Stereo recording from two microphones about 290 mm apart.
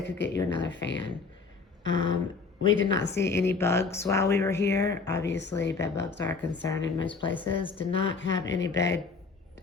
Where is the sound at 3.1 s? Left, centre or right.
Centre.